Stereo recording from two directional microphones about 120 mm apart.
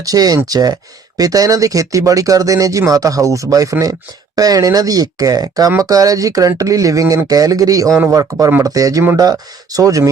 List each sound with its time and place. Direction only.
0.0 s speech: 30° right (ahead or behind)